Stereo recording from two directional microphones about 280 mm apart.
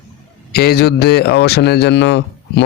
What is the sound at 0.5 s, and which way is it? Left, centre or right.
Speech, left.